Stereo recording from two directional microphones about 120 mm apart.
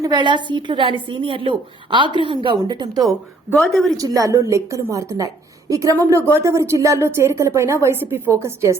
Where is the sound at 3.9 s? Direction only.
30° right (ahead or behind).